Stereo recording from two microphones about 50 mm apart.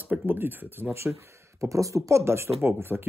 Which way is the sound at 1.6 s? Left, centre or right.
Right.